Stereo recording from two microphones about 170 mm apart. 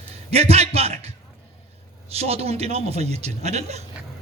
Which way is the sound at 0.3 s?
40° right (ahead or behind).